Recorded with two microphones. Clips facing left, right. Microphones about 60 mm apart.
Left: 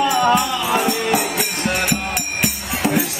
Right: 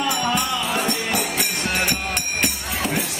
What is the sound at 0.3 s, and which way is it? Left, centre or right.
Music, centre.